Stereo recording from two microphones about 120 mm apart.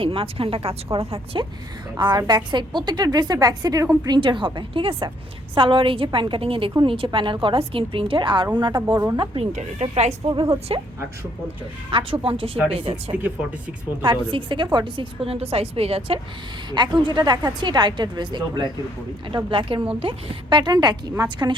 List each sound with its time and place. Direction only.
0.0 s a woman's voice: 50° right (ahead or behind)
2.0 s a woman's voice: 35° right (ahead or behind)
8.9 s speech: 25° right (ahead or behind)
9.1 s a woman's voice: 50° right (ahead or behind)
10.7 s a woman's voice: 50° right (ahead or behind)
11.9 s a woman's voice: 50° right (ahead or behind)
16.7 s a woman's voice: 40° right (ahead or behind)